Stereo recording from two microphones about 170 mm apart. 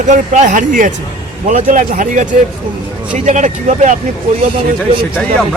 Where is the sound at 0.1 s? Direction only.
45° right (ahead or behind).